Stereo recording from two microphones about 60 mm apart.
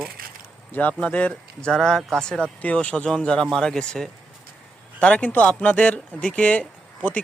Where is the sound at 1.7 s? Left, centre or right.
Centre.